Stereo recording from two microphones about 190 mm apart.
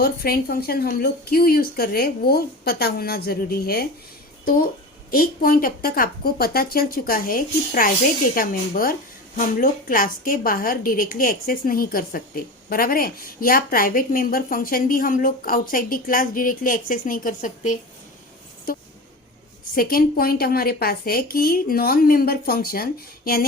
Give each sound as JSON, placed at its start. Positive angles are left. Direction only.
{"t": 0.0, "sound": "a woman's voice", "side_deg": 55}
{"t": 5.1, "sound": "speech", "side_deg": 50}